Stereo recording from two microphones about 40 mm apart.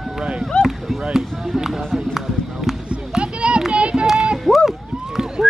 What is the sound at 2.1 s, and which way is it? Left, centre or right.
Basketball bounce, centre.